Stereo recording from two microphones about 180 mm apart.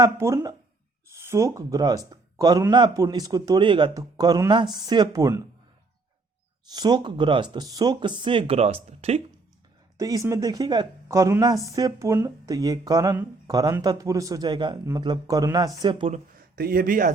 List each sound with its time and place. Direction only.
0.0 s a woman's voice: 15° right (ahead or behind)
6.7 s a woman's voice: 25° right (ahead or behind)
10.0 s a woman's voice: 20° right (ahead or behind)
16.6 s speech: 55° right (ahead or behind)